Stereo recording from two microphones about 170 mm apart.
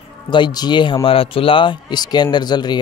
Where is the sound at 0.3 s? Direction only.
25° left (ahead or behind).